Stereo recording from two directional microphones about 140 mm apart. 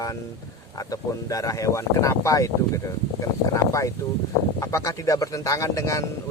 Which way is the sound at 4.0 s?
20° left (ahead or behind).